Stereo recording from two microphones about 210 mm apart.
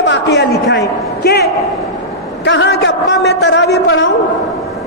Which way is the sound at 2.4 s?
55° left (ahead or behind).